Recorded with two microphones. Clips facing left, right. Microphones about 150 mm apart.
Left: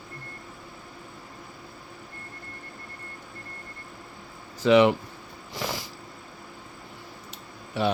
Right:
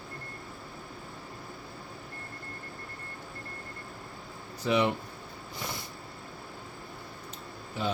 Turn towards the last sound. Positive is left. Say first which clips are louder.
# left 6 dB
turn(degrees=75)  # may be behind; listen again after turning